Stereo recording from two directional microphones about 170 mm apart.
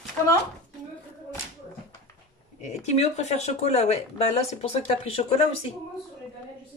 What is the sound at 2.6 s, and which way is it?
Speech, 40° left (ahead or behind).